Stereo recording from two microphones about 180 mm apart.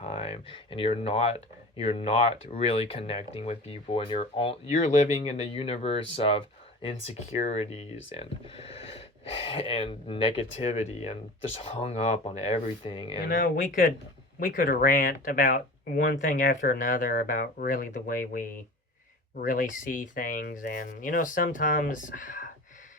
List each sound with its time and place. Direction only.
0.0 s speech: 35° left (ahead or behind)
13.2 s speech: 50° left (ahead or behind)
19.5 s speech: 45° left (ahead or behind)